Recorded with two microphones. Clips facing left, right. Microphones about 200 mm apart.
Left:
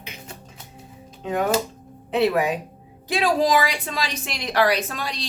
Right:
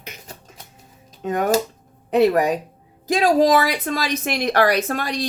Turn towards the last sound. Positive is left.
turn(degrees=-50)  # may be behind; listen again after turning